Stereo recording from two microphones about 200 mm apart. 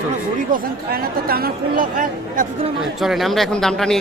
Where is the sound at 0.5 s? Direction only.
50° right (ahead or behind).